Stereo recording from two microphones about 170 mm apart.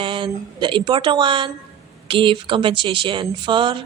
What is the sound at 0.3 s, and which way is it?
Speech, 25° right (ahead or behind).